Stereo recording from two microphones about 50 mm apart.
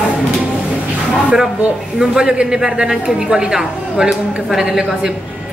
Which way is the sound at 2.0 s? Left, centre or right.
Centre.